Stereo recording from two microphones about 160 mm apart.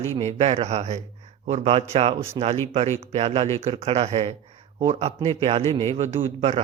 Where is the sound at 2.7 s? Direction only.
40° right (ahead or behind).